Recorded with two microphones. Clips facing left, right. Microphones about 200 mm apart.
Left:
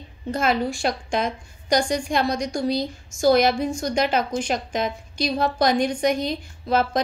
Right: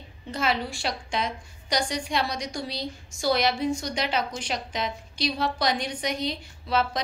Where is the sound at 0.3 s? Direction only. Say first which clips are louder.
Left 5 dB; 45° left (ahead or behind).